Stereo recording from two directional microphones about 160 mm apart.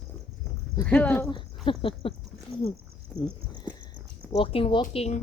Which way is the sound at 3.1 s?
Centre (ahead or behind).